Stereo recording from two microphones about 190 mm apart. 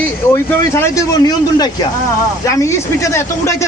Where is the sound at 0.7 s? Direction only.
15° left (ahead or behind).